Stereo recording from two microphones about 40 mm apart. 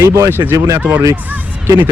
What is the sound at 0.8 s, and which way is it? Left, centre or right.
Speech, right.